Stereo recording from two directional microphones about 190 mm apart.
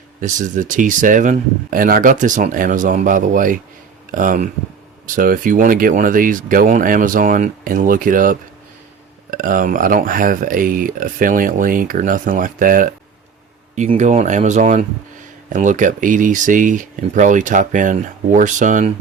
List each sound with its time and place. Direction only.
0.2 s speech: 40° right (ahead or behind)
13.9 s speech: 40° right (ahead or behind)